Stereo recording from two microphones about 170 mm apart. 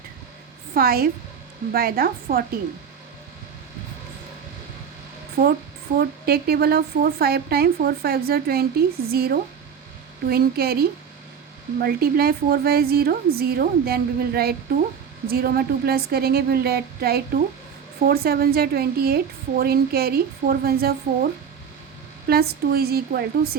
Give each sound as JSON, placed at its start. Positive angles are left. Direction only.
{"t": 0.7, "sound": "a woman's voice", "side_deg": -60}
{"t": 5.4, "sound": "a woman's voice", "side_deg": -60}
{"t": 22.3, "sound": "a woman's voice", "side_deg": -65}